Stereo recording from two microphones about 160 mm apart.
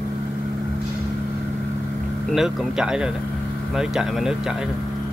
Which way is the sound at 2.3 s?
5° right (ahead or behind).